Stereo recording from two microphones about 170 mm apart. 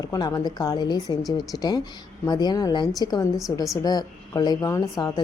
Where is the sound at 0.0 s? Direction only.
20° left (ahead or behind).